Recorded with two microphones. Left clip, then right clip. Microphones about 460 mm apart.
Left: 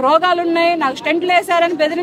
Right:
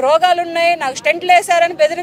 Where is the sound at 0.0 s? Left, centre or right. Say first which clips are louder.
Right 1 dB; right.